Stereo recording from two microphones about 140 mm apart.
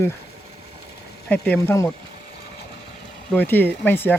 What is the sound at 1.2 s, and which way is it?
Speech, 10° left (ahead or behind).